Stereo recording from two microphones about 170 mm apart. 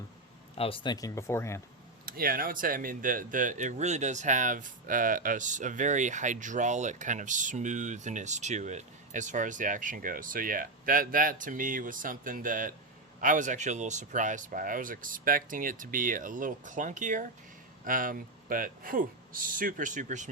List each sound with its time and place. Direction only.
0.5 s speech: 35° left (ahead or behind); by 1.6 s 15° left (ahead or behind)
2.0 s speech: 60° right (ahead or behind)